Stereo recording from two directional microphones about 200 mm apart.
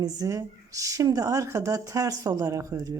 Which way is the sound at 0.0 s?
15° right (ahead or behind).